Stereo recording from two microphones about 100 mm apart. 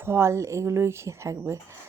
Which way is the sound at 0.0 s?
25° right (ahead or behind).